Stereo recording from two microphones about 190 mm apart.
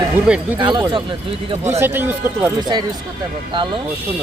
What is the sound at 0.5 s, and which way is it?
Speech, 25° right (ahead or behind).